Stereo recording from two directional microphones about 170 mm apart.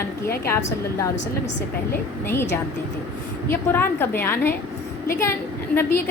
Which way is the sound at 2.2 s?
15° left (ahead or behind).